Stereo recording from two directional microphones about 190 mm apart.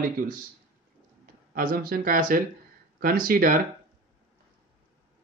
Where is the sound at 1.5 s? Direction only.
50° right (ahead or behind).